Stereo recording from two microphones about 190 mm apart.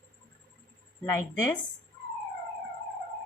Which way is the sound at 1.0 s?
10° left (ahead or behind).